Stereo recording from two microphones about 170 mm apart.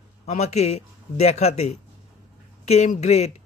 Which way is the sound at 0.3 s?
40° left (ahead or behind).